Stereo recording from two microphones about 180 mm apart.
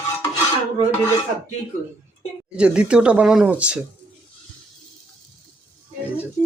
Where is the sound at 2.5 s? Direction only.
5° right (ahead or behind).